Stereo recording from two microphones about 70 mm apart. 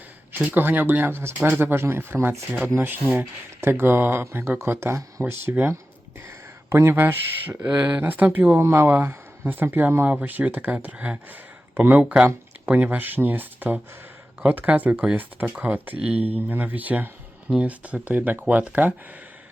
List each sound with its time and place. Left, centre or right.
0.4 s speech: right
7.7 s speech: right